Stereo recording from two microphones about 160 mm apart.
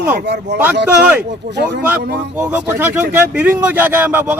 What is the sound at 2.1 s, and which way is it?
A man's voice, 10° right (ahead or behind).